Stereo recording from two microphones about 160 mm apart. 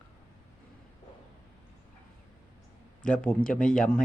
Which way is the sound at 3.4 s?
60° left (ahead or behind).